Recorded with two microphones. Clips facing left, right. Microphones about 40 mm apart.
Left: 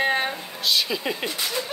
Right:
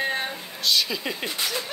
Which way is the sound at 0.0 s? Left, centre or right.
Left.